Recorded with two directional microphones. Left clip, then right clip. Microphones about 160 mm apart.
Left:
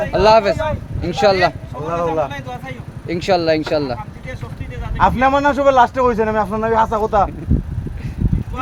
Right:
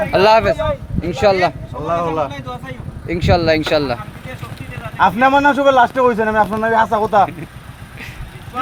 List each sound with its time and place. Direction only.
0.1 s speech: centre (ahead or behind)
1.9 s speech: 70° right (ahead or behind)
2.3 s speech: 10° left (ahead or behind)
4.9 s a man's voice: 60° right (ahead or behind)